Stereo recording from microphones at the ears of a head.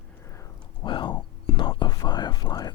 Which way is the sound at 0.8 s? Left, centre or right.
Left.